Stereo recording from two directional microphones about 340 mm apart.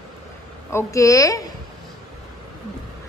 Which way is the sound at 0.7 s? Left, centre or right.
Centre.